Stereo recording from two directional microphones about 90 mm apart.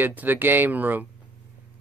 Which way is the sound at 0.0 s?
20° right (ahead or behind).